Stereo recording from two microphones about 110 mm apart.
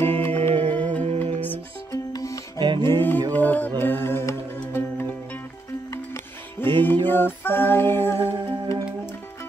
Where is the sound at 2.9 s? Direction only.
20° left (ahead or behind).